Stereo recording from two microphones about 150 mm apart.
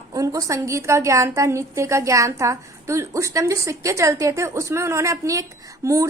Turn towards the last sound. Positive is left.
turn(degrees=-20)  # may be behind; listen again after turning